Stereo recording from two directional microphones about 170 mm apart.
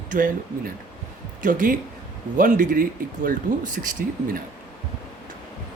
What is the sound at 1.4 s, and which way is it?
Speech, 50° right (ahead or behind).